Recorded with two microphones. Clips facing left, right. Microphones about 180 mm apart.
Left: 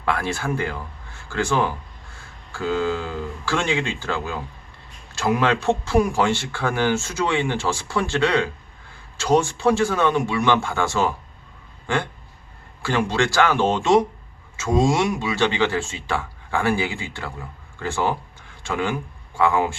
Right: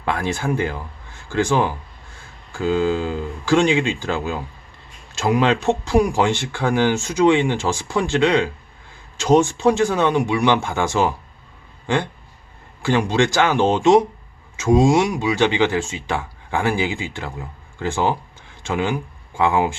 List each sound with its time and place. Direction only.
0.0 s speech: 20° right (ahead or behind)
12.8 s speech: 15° right (ahead or behind)